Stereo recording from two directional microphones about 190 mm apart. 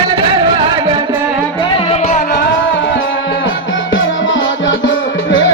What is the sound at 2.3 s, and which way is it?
Music, 60° left (ahead or behind).